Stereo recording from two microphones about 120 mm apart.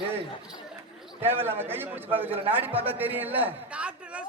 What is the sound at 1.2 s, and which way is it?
A man's voice, 20° right (ahead or behind).